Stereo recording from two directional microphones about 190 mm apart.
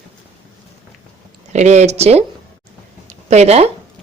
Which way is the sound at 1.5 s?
35° right (ahead or behind).